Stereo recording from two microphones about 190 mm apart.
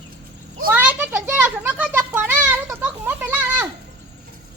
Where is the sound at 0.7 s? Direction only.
10° right (ahead or behind).